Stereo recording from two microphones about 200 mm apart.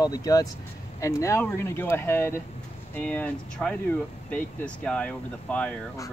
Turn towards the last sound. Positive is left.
turn(degrees=5)  # may be behind; listen again after turning